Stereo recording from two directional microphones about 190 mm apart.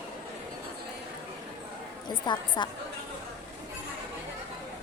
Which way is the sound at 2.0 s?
25° left (ahead or behind).